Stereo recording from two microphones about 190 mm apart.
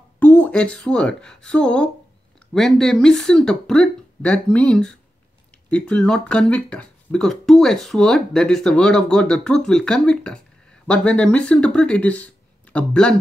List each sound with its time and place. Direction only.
0.2 s a woman's voice: 5° left (ahead or behind)